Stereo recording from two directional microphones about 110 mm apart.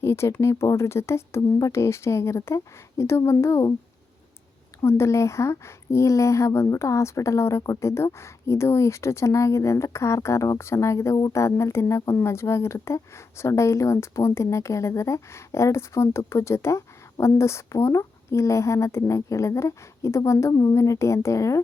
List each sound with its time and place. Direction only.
0.0 s speech: 25° left (ahead or behind)
4.8 s speech: 25° left (ahead or behind)